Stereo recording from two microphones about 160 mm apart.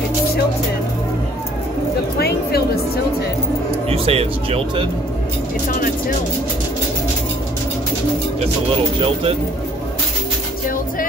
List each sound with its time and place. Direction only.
2.1 s a sound: 80° left
3.9 s speech: 40° right (ahead or behind)
9.0 s speech: 35° right (ahead or behind)